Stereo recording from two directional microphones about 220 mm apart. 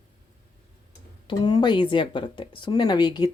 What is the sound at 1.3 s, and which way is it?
Speech, 20° left (ahead or behind).